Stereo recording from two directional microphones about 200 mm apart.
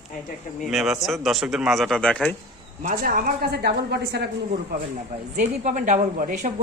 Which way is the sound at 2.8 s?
45° right (ahead or behind).